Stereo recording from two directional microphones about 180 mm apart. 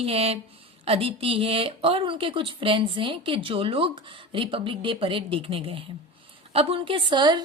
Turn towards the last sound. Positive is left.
turn(degrees=-25)  # may be behind; listen again after turning